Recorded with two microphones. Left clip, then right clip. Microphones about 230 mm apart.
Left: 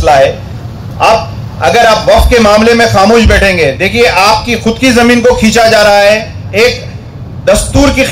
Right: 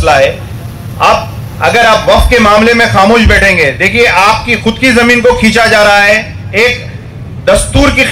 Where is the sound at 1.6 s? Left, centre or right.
Left.